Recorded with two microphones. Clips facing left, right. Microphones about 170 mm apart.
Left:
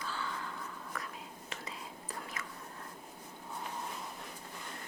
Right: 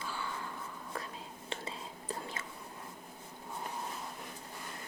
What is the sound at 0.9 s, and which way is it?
Whispering, 30° right (ahead or behind).